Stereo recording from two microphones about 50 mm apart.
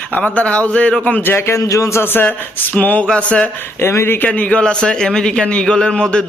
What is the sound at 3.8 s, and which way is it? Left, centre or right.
Speech, left.